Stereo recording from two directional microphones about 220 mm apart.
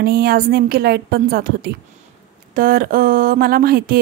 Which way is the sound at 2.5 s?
40° right (ahead or behind).